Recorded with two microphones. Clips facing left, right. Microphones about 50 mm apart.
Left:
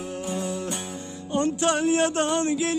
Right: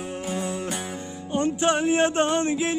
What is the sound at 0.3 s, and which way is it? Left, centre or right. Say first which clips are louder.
Music: right 1 dB; right.